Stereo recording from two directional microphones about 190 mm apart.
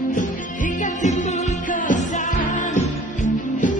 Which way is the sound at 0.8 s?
40° left (ahead or behind).